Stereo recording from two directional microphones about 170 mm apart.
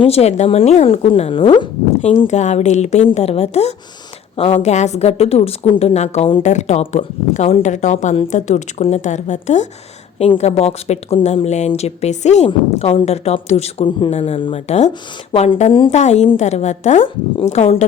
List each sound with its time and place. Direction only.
0.0 s speech: 35° left (ahead or behind)
2.0 s speech: 40° left (ahead or behind)